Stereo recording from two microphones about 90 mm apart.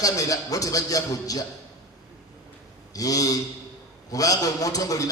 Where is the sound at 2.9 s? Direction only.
40° left (ahead or behind).